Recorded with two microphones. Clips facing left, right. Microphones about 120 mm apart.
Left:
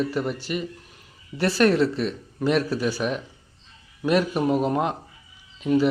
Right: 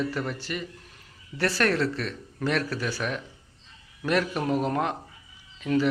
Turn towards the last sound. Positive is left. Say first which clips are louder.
# left 4 dB
turn(degrees=15)  # may be behind; listen again after turning